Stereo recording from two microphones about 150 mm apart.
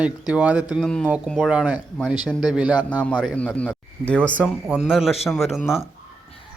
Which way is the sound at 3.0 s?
5° left (ahead or behind).